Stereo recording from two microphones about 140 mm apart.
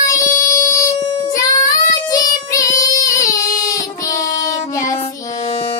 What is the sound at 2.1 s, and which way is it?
Child singing, 25° left (ahead or behind).